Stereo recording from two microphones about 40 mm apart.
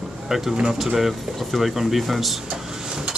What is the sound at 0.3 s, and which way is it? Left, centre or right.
Speech, centre.